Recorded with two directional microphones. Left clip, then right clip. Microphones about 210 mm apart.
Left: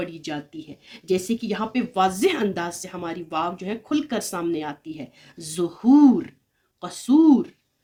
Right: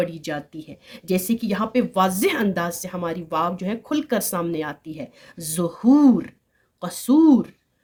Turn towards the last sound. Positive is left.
turn(degrees=-55)  # may be behind; listen again after turning